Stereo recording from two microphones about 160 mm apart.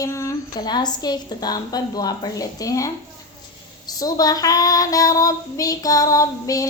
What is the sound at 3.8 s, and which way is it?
Female singing, 25° left (ahead or behind).